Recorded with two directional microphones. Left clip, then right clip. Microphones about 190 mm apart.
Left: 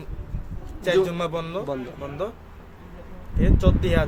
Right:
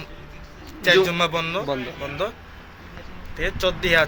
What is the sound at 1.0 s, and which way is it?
Speech, 15° left (ahead or behind).